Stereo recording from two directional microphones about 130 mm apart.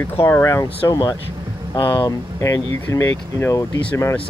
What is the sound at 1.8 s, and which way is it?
Speech, 40° left (ahead or behind).